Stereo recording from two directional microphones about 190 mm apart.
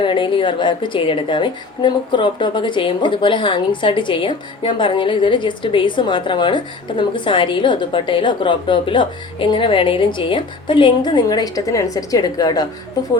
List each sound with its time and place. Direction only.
0.0 s a woman's voice: 25° left (ahead or behind)